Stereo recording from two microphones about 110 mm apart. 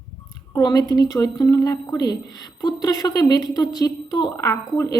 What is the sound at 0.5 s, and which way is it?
A woman's voice, 35° left (ahead or behind).